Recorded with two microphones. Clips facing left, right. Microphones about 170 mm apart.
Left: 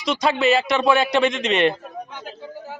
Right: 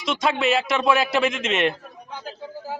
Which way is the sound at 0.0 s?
Centre (ahead or behind).